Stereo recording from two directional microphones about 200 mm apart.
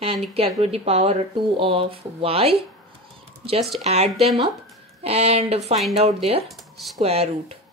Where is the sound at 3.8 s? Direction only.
35° right (ahead or behind).